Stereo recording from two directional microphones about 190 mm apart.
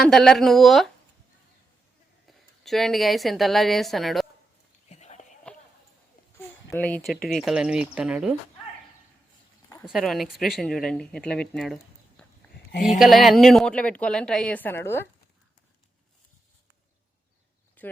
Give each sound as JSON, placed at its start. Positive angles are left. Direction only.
{"t": 0.0, "sound": "speech", "side_deg": 0}
{"t": 2.2, "sound": "a woman's voice", "side_deg": 0}
{"t": 4.9, "sound": "a sound", "side_deg": 35}
{"t": 6.7, "sound": "speech", "side_deg": 10}
{"t": 9.8, "sound": "speech", "side_deg": 0}
{"t": 17.8, "sound": "a sound", "side_deg": 10}